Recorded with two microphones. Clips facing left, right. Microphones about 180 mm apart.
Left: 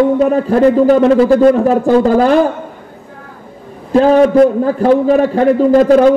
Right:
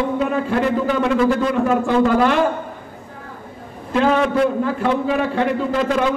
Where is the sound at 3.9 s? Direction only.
40° left (ahead or behind).